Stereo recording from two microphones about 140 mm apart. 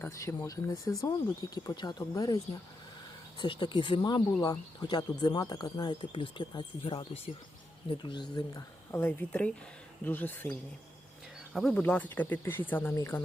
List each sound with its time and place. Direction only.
0.0 s speech: 20° left (ahead or behind)
8.9 s speech: 15° left (ahead or behind)
11.5 s speech: centre (ahead or behind); by 13.2 s 20° left (ahead or behind)